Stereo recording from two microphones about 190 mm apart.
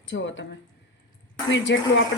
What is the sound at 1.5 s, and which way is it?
Speech, 75° left (ahead or behind).